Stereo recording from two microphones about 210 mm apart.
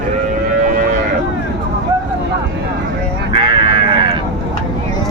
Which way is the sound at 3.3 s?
25° right (ahead or behind).